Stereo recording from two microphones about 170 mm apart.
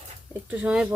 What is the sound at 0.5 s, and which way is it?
Speech, 5° right (ahead or behind).